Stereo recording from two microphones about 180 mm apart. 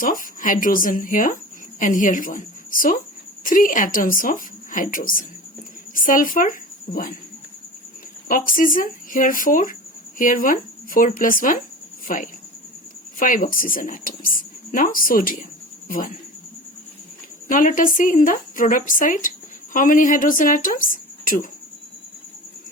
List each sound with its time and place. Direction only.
0.0 s a woman's voice: 50° left (ahead or behind)
8.3 s a woman's voice: 50° left (ahead or behind)
17.5 s a woman's voice: 45° left (ahead or behind)